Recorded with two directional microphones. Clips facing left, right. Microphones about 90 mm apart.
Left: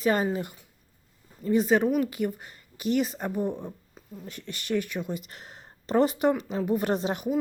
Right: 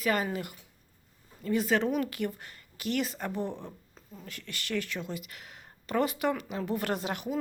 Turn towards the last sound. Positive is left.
turn(degrees=25)  # may be behind; listen again after turning